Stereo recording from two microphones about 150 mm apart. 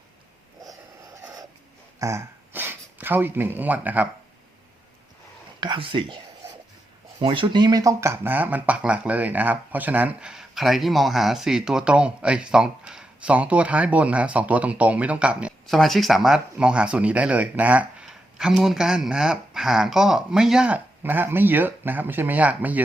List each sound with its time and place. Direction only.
2.0 s a sound: 20° right (ahead or behind)
5.5 s speech: 30° right (ahead or behind)
7.2 s speech: 35° right (ahead or behind); by 22.8 s 10° right (ahead or behind)